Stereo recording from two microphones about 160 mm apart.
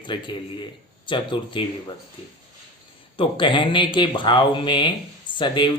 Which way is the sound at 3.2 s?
30° left (ahead or behind).